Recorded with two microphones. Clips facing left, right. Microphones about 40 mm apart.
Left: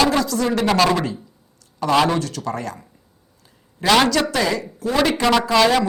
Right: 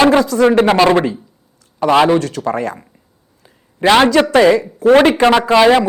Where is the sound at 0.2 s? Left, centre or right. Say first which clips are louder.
Right 9 dB; right.